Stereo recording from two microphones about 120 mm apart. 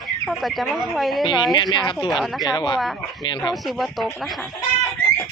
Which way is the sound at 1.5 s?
35° left (ahead or behind).